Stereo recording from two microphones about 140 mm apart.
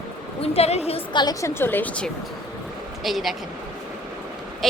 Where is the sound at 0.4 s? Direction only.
45° left (ahead or behind).